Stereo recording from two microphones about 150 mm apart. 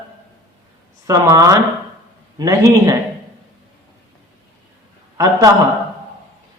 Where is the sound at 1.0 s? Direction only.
20° right (ahead or behind).